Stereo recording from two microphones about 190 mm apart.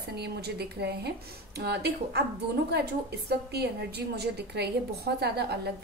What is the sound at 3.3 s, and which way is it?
A woman's voice, 60° right (ahead or behind).